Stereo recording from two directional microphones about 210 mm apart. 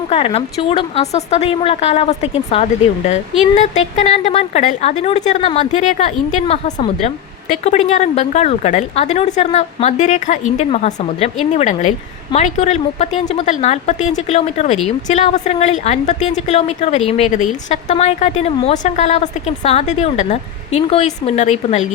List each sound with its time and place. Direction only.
0.1 s speech: 30° left (ahead or behind)